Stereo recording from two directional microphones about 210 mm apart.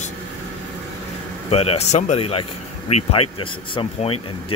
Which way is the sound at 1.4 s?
30° left (ahead or behind).